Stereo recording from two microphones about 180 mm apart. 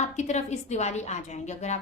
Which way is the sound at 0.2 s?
40° left (ahead or behind).